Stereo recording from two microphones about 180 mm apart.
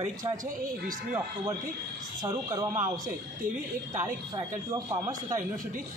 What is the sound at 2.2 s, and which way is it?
Speech, 25° right (ahead or behind).